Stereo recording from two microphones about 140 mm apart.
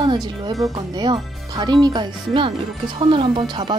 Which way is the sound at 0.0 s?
35° right (ahead or behind).